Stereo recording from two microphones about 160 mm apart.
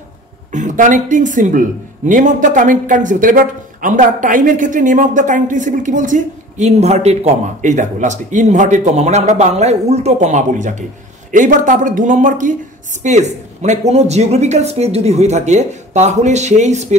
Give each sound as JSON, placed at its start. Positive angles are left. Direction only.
{"t": 0.5, "sound": "speech", "side_deg": -50}